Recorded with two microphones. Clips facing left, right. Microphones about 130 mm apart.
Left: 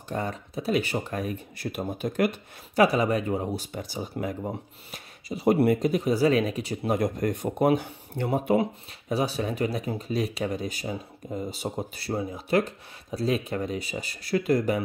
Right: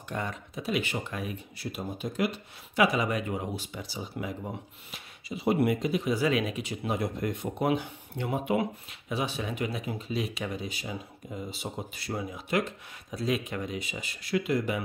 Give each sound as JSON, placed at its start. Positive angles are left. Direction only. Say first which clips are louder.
{"t": 0.1, "sound": "speech", "louder": "left 4 dB", "side_deg": 35}